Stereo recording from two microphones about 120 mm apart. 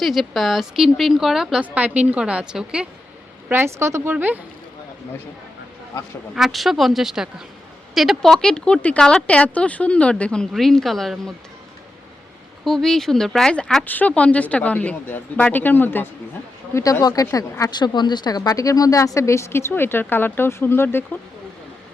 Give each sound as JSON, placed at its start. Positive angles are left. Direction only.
{"t": 0.0, "sound": "speech", "side_deg": 0}
{"t": 3.5, "sound": "speech", "side_deg": -20}
{"t": 6.3, "sound": "speech", "side_deg": 0}
{"t": 12.6, "sound": "speech", "side_deg": 0}
{"t": 16.7, "sound": "speech", "side_deg": 25}